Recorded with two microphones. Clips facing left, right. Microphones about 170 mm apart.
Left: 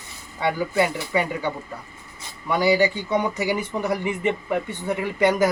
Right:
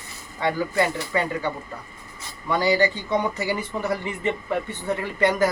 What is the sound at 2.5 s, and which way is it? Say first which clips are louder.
Speech: left 1 dB; 10° left (ahead or behind).